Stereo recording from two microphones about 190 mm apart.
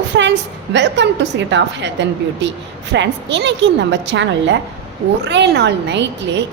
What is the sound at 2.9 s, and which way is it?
A woman's voice, 70° right (ahead or behind).